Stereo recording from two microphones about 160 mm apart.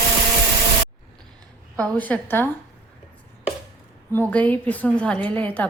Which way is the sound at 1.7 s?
5° left (ahead or behind).